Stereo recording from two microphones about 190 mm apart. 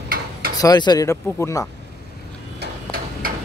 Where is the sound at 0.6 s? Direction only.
20° left (ahead or behind).